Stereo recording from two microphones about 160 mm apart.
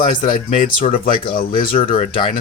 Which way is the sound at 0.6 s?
60° left (ahead or behind).